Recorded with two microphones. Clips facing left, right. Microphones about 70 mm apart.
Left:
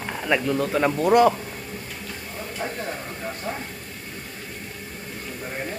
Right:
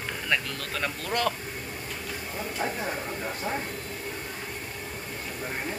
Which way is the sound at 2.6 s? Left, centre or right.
Centre.